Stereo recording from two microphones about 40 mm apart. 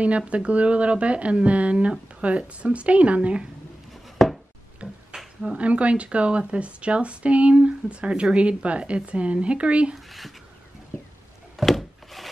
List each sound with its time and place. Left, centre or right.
0.2 s speech: right
4.2 s a sound: centre
4.8 s finger snapping: right
5.4 s speech: right
9.9 s speech: centre
11.5 s wood: centre